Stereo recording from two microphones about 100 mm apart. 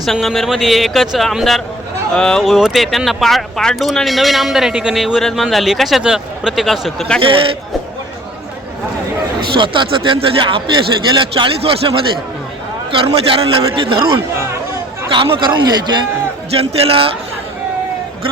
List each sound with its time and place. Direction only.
0.0 s speech: centre (ahead or behind)
2.4 s speech: 5° right (ahead or behind)
9.5 s a man's voice: 55° right (ahead or behind)
16.6 s a man's voice: 75° right (ahead or behind)